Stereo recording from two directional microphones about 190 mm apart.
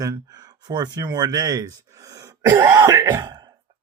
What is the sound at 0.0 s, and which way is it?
Speech, 20° right (ahead or behind).